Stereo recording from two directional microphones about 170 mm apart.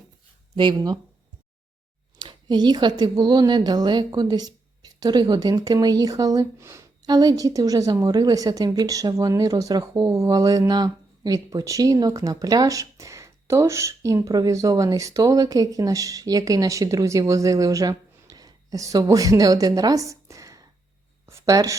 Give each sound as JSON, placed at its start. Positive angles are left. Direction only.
{"t": 0.5, "sound": "speech", "side_deg": -25}
{"t": 2.1, "sound": "speech", "side_deg": -25}